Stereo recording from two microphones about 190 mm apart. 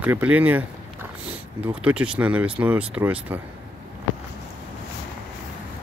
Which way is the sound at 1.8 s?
5° right (ahead or behind).